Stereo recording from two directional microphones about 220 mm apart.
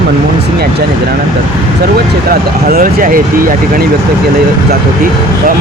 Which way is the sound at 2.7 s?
40° right (ahead or behind).